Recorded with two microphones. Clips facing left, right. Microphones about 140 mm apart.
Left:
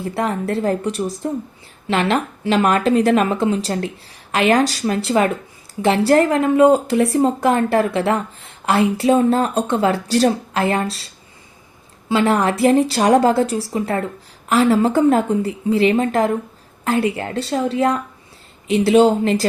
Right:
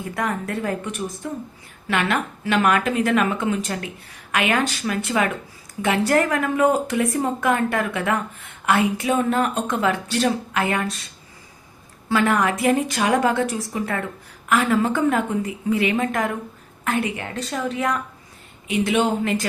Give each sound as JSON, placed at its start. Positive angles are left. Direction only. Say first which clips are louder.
{"t": 0.0, "sound": "speech", "louder": "left 4 dB", "side_deg": 30}